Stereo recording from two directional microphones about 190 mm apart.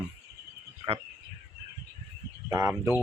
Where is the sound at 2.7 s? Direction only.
10° right (ahead or behind).